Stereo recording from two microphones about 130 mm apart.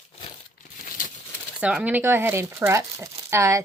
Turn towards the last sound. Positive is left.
turn(degrees=-20)  # may be behind; listen again after turning